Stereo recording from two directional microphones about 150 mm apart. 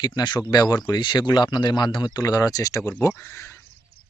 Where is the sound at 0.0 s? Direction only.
30° left (ahead or behind).